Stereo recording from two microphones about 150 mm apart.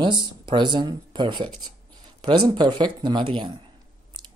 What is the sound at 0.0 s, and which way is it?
Speech, 30° right (ahead or behind).